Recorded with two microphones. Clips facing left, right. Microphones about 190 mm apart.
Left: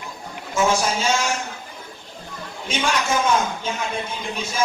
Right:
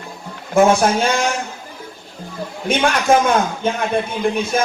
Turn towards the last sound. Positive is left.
turn(degrees=-60)  # may be behind; listen again after turning